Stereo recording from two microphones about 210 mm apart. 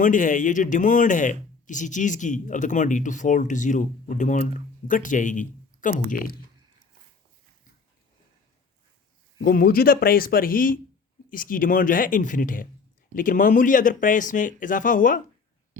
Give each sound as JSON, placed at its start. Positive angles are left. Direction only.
{"t": 0.0, "sound": "speech", "side_deg": 40}
{"t": 9.4, "sound": "speech", "side_deg": 45}